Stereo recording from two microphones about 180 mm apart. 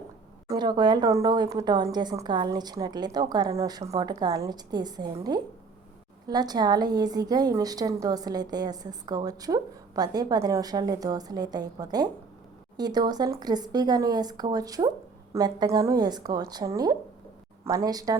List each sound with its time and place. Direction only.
0.4 s a woman's voice: 25° right (ahead or behind)